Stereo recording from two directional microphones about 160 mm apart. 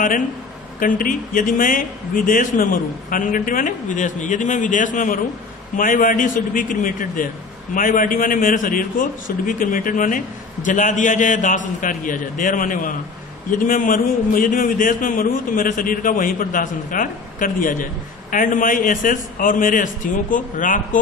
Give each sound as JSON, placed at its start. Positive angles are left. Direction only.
{"t": 0.7, "sound": "a man's voice", "side_deg": 55}